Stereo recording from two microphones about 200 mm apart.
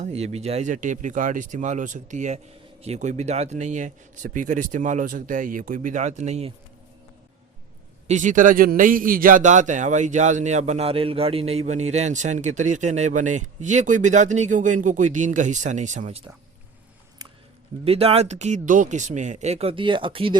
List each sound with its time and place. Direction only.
0.0 s a man's voice: 30° right (ahead or behind)
8.0 s a man's voice: 40° right (ahead or behind)
17.2 s a sound: 20° right (ahead or behind)
17.8 s a man's voice: 30° right (ahead or behind)